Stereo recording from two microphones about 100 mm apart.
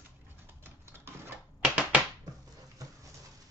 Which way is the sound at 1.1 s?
25° right (ahead or behind).